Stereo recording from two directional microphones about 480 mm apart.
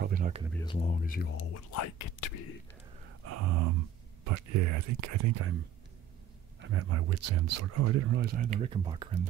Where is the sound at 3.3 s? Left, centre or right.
Right.